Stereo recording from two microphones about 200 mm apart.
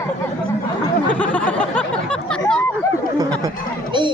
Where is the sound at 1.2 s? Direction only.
5° left (ahead or behind).